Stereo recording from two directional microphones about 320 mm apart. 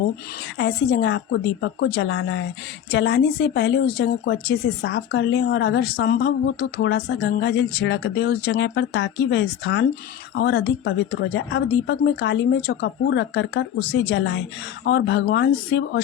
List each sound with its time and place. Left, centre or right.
0.6 s speech: left